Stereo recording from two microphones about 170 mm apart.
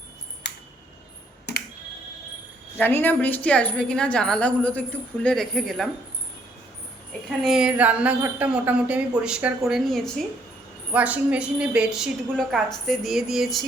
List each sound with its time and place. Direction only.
1.5 s music: 75° left (ahead or behind)
2.7 s a woman's voice: 10° left (ahead or behind)
7.1 s a woman's voice: centre (ahead or behind)